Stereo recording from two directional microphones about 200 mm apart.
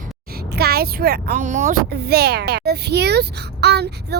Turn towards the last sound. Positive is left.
turn(degrees=-55)  # may be behind; listen again after turning